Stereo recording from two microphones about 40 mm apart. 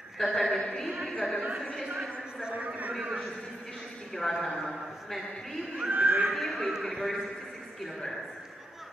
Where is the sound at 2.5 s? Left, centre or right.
Right.